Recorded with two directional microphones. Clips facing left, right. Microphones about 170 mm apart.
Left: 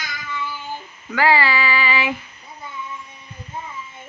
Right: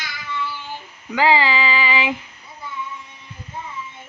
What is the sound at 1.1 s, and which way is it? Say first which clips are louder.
Female singing: right 1 dB; 15° right (ahead or behind).